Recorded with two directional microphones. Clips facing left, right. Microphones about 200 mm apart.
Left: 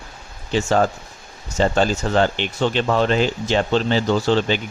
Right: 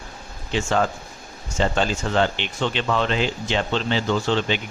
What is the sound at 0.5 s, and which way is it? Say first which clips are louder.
Speech: left 4 dB; 40° left (ahead or behind).